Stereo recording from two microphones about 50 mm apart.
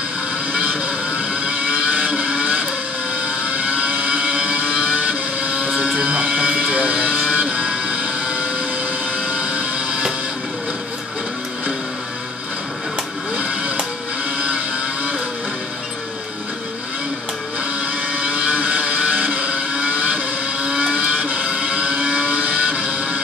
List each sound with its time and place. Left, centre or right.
0.5 s vehicle: right
6.7 s music: right
9.1 s a sound: right
18.1 s vehicle: right